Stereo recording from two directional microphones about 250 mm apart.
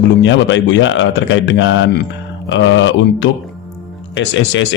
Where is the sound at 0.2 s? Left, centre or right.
Left.